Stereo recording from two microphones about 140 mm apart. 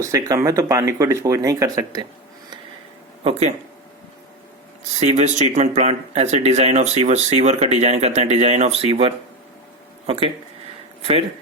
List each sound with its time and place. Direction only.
0.0 s speech: 20° right (ahead or behind)
5.0 s speech: 55° right (ahead or behind)
8.9 s speech: 40° right (ahead or behind)